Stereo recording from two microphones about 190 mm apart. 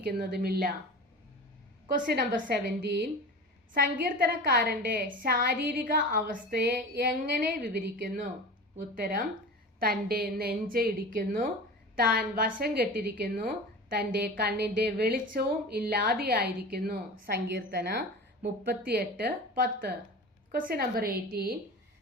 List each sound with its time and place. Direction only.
0.0 s a woman's voice: 55° right (ahead or behind)
2.0 s a woman's voice: 50° right (ahead or behind)